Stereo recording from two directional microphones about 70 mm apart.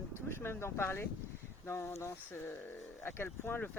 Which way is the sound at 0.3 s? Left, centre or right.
Left.